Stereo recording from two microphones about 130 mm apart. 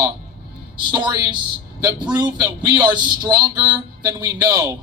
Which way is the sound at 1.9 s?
10° right (ahead or behind).